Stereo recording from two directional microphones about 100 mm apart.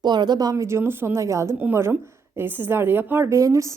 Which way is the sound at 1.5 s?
20° right (ahead or behind).